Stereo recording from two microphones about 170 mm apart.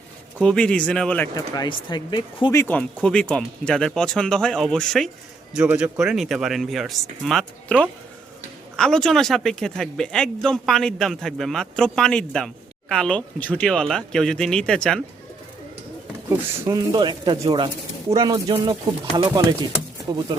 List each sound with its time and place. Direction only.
0.3 s speech: 5° left (ahead or behind)
1.4 s speech: 25° left (ahead or behind)
2.6 s speech: 10° left (ahead or behind)
16.6 s speech: 25° right (ahead or behind)